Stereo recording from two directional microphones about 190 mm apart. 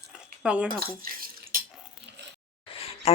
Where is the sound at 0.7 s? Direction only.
50° right (ahead or behind).